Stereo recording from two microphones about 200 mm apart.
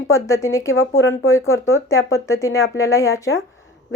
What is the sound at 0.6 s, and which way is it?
Speech, 75° left (ahead or behind).